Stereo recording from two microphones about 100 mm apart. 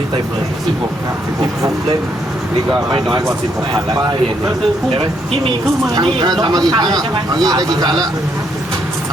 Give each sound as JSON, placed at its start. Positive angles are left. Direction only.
{"t": 5.9, "sound": "a man's voice", "side_deg": -45}